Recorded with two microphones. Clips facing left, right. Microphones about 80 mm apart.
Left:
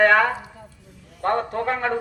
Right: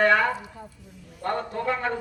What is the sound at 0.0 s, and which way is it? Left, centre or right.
A man's voice, left.